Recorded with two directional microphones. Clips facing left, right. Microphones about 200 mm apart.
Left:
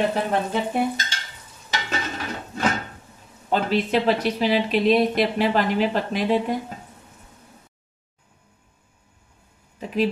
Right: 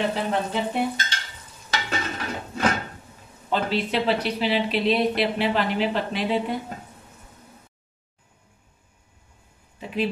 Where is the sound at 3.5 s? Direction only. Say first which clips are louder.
Left 3 dB; 45° left (ahead or behind).